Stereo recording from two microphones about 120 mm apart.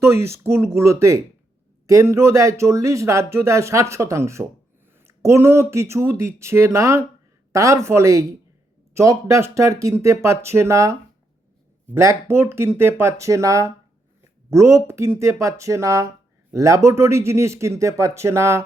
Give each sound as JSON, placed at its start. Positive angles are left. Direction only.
{"t": 0.0, "sound": "speech", "side_deg": -20}
{"t": 11.9, "sound": "speech", "side_deg": -20}